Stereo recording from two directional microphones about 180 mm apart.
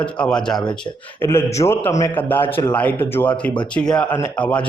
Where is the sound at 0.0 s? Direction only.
5° left (ahead or behind).